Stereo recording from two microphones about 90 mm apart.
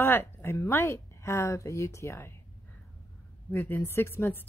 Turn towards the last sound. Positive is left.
turn(degrees=25)  # may be behind; listen again after turning